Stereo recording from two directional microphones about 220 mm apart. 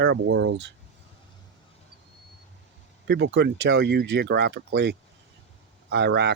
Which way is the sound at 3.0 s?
50° right (ahead or behind).